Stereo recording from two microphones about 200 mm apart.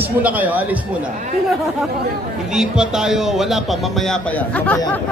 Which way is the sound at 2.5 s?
5° right (ahead or behind).